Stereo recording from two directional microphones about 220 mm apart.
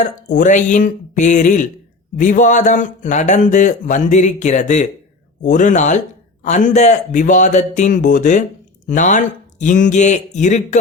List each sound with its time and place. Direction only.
0.0 s speech: 35° left (ahead or behind)